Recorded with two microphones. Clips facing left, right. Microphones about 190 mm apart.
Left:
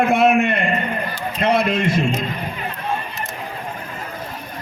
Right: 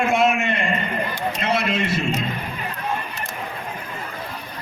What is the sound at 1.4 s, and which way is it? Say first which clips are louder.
Speech: left 6 dB; 50° left (ahead or behind).